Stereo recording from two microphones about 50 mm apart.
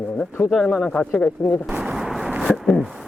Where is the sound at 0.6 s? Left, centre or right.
Centre.